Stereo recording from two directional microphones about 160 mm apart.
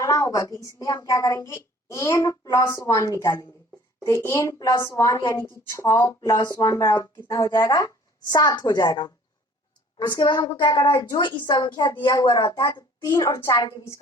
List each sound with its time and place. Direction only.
0.0 s a woman's voice: 20° left (ahead or behind)